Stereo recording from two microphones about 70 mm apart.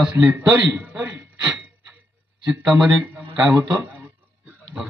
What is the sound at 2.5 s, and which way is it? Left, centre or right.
Speech, centre.